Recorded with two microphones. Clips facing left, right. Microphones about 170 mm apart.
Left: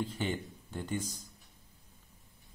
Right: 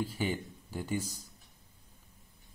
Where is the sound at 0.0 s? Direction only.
5° right (ahead or behind).